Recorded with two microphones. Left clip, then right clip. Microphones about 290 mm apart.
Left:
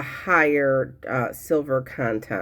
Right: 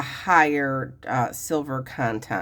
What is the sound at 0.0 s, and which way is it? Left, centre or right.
Speech, centre.